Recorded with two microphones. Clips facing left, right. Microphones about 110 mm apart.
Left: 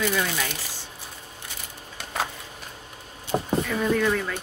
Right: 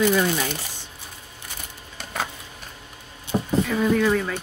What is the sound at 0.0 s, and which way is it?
Speech, 20° right (ahead or behind).